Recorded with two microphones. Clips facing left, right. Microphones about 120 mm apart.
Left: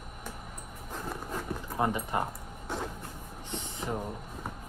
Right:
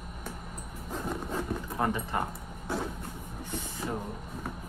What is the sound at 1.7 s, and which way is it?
Speech, 15° left (ahead or behind).